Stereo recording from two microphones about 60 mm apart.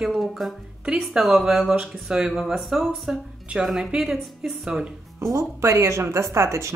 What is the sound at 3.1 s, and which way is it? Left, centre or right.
Speech, centre.